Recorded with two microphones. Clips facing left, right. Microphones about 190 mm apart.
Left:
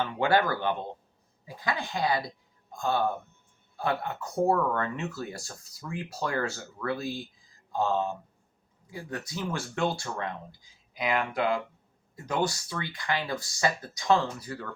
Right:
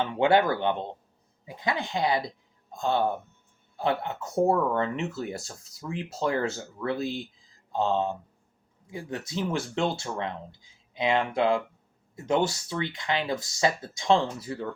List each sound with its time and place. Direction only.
0.0 s a man's voice: 20° right (ahead or behind)